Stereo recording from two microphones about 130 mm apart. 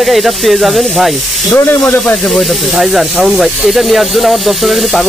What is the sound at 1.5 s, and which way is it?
Speech, 15° left (ahead or behind).